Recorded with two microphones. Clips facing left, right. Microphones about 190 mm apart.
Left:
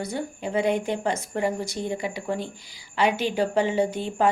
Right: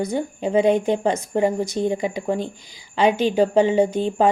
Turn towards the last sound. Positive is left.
turn(degrees=-20)  # may be behind; listen again after turning